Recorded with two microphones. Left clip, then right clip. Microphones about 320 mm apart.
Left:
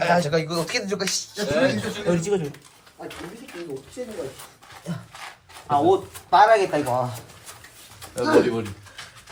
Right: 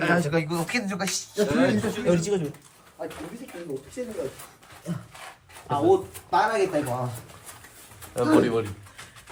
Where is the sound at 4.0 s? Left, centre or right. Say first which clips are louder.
Even; centre.